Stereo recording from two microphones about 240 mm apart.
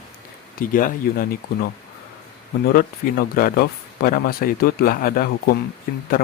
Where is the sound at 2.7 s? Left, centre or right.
Left.